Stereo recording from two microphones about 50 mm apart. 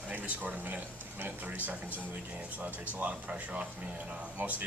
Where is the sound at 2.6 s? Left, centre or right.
Right.